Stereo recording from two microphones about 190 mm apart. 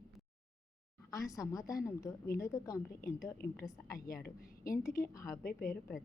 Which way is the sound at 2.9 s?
55° left (ahead or behind).